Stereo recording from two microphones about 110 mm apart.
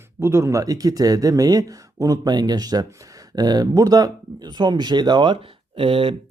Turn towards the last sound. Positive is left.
turn(degrees=-55)  # may be behind; listen again after turning